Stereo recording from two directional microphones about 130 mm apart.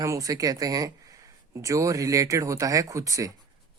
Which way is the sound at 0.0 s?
25° right (ahead or behind).